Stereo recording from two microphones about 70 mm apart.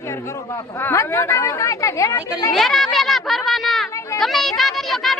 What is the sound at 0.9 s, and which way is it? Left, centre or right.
A woman's voice, left.